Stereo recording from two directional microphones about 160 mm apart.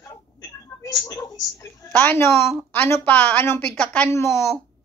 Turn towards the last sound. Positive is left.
turn(degrees=15)  # may be behind; listen again after turning